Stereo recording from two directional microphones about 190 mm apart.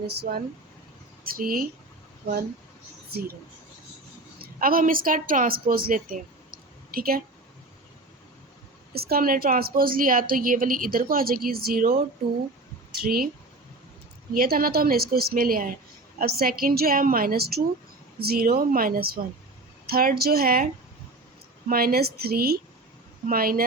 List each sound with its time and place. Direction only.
0.2 s a woman's voice: 55° right (ahead or behind)
4.6 s a woman's voice: 50° right (ahead or behind)
8.9 s a woman's voice: 55° right (ahead or behind)
13.0 s a woman's voice: 50° right (ahead or behind)
14.3 s a woman's voice: 50° right (ahead or behind)
21.7 s a woman's voice: 50° right (ahead or behind)